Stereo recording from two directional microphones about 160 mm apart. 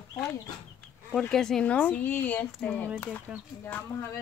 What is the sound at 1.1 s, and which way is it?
Speech, 5° left (ahead or behind).